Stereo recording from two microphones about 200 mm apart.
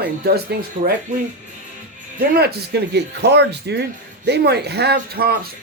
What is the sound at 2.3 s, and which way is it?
Speech, 55° right (ahead or behind).